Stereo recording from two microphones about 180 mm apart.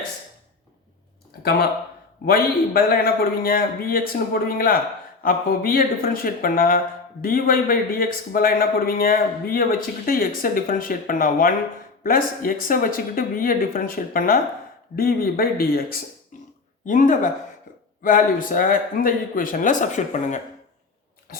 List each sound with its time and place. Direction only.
1.4 s a man's voice: 60° left (ahead or behind)
16.8 s speech: 45° left (ahead or behind)